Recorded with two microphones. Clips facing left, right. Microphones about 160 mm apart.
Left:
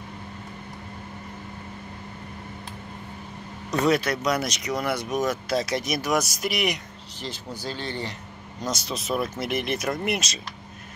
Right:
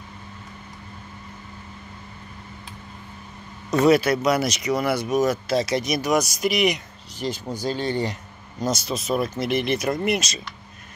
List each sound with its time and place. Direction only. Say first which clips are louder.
3.8 s speech: right 5 dB; 5° right (ahead or behind)
7.2 s speech: right 7 dB; 15° right (ahead or behind)
8.6 s speech: right 4 dB; centre (ahead or behind)